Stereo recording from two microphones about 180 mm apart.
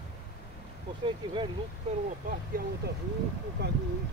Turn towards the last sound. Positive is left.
turn(degrees=-65)  # may be behind; listen again after turning